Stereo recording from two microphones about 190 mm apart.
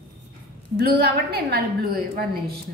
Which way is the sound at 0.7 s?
55° right (ahead or behind).